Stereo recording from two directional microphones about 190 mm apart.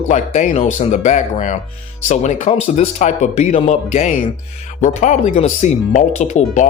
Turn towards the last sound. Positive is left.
turn(degrees=40)  # may be behind; listen again after turning